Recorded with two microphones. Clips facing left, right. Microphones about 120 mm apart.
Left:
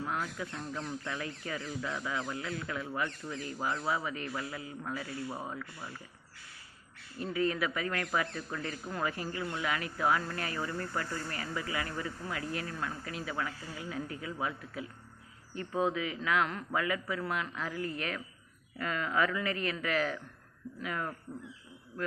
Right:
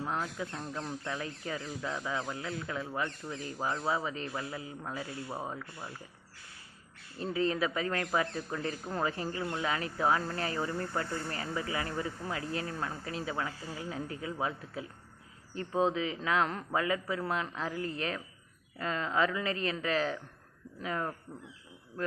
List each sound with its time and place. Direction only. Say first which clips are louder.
0.0 s speech: right 1 dB; 25° right (ahead or behind)
7.2 s speech: right 1 dB; 25° right (ahead or behind)